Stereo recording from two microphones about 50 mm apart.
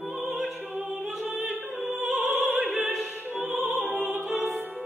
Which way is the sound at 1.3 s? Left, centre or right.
Right.